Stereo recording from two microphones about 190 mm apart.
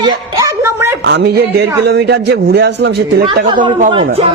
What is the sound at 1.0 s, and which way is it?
A man's voice, 65° right (ahead or behind).